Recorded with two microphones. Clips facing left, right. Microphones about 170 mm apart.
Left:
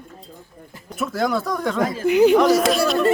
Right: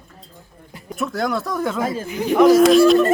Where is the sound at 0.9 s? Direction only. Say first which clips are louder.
Left 1 dB; centre (ahead or behind).